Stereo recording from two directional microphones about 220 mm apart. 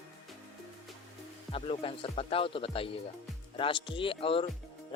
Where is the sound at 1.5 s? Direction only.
25° left (ahead or behind).